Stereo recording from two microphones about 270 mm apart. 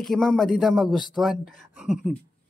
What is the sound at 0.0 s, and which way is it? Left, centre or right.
Speech, centre.